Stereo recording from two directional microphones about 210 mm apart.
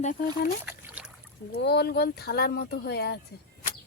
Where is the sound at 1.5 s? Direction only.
50° left (ahead or behind).